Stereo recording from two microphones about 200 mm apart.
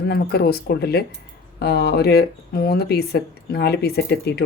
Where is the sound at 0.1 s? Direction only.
50° left (ahead or behind).